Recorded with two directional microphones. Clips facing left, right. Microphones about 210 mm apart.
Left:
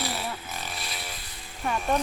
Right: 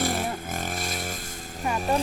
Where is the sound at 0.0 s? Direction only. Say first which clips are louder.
Right 5 dB; 50° right (ahead or behind).